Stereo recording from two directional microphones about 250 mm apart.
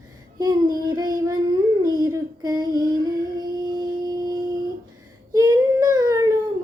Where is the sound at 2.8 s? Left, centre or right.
Centre.